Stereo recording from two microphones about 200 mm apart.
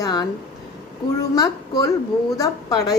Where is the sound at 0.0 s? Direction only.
20° left (ahead or behind).